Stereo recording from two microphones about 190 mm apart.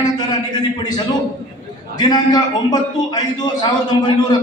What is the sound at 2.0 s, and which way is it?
A man's voice, 20° left (ahead or behind).